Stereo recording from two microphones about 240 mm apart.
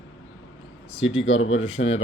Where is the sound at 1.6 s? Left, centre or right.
Left.